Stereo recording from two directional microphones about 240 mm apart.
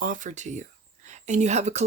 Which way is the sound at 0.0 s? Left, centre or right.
Right.